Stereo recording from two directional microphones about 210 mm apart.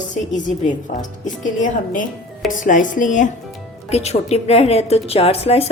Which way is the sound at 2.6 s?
40° left (ahead or behind).